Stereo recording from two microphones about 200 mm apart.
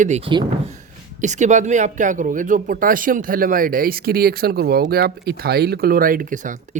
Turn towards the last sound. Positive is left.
turn(degrees=-40)  # may be behind; listen again after turning